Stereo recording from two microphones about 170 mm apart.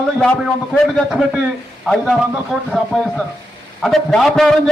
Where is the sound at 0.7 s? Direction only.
5° right (ahead or behind).